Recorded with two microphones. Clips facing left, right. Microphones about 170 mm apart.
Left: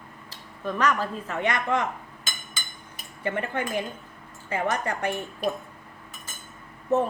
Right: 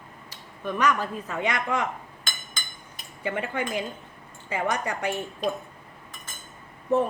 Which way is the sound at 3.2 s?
10° right (ahead or behind).